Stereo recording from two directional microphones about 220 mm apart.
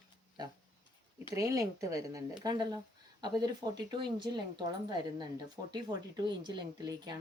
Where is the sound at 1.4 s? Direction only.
15° right (ahead or behind).